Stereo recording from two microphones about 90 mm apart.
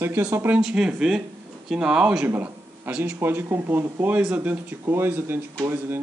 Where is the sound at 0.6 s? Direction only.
10° right (ahead or behind).